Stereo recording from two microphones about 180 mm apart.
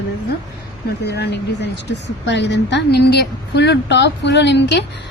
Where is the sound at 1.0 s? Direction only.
65° left (ahead or behind).